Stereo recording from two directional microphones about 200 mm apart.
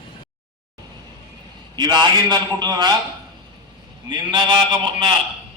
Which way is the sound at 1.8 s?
20° right (ahead or behind).